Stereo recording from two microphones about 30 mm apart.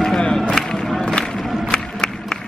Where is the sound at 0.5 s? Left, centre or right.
Left.